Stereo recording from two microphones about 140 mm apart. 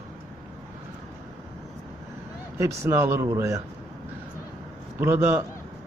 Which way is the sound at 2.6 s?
20° right (ahead or behind).